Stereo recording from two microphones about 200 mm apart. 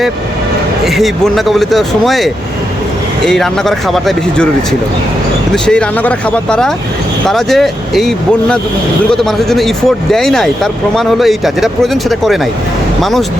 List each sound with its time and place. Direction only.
0.9 s speech: centre (ahead or behind)
5.6 s speech: 5° left (ahead or behind)